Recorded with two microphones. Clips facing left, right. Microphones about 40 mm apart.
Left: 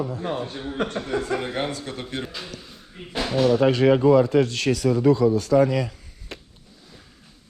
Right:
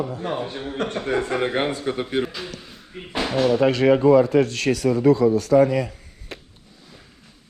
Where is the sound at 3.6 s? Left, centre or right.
Right.